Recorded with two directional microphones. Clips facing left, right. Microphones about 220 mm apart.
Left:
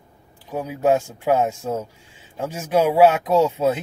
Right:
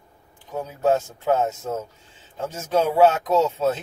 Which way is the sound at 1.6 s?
30° left (ahead or behind).